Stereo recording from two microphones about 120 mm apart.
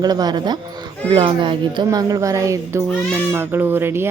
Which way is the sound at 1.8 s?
30° right (ahead or behind).